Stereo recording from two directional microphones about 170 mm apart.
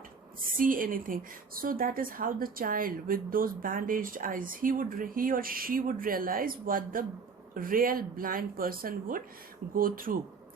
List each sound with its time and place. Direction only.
0.5 s a woman's voice: 55° right (ahead or behind)